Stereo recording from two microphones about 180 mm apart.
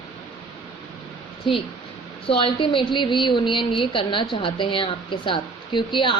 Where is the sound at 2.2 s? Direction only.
30° left (ahead or behind).